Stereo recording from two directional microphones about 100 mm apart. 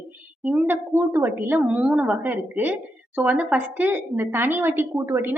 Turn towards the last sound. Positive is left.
turn(degrees=-25)  # may be behind; listen again after turning